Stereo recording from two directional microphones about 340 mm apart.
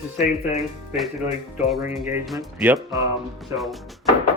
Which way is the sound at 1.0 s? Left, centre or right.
Centre.